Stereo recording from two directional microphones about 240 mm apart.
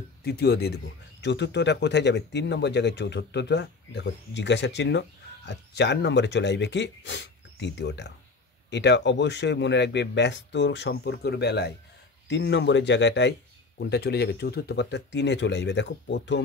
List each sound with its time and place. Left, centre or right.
0.2 s speech: left